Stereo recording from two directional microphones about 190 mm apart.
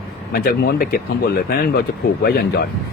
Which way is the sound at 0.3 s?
55° left (ahead or behind).